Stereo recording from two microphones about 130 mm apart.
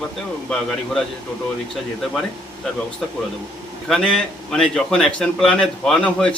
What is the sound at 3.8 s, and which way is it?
A man's voice, 5° left (ahead or behind).